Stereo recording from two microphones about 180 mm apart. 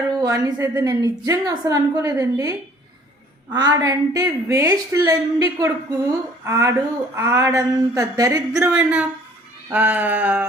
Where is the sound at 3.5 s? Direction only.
20° right (ahead or behind).